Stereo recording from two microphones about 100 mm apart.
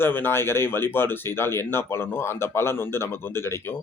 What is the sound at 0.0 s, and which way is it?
Speech, 20° left (ahead or behind).